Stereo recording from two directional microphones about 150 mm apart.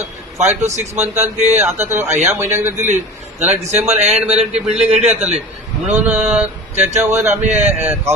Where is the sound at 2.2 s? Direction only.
15° right (ahead or behind).